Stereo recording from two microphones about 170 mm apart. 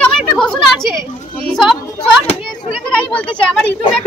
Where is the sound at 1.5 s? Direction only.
Centre (ahead or behind).